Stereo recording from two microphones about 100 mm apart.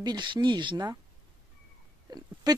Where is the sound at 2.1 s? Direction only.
40° right (ahead or behind).